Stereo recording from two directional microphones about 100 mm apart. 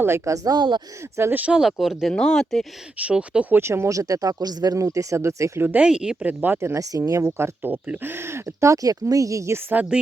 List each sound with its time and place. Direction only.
0.0 s speech: 30° right (ahead or behind); by 0.8 s 45° right (ahead or behind)
1.1 s speech: 20° right (ahead or behind); by 2.6 s 5° left (ahead or behind)
3.0 s speech: 10° right (ahead or behind)
3.6 s speech: 25° right (ahead or behind)
6.7 s speech: 35° right (ahead or behind)
7.3 s speech: 20° right (ahead or behind)